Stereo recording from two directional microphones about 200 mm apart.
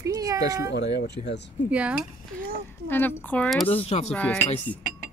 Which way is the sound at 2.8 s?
10° left (ahead or behind).